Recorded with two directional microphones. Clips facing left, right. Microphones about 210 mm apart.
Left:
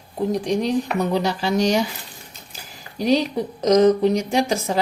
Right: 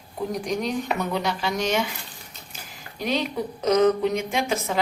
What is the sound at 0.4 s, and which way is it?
A woman's voice, 30° left (ahead or behind).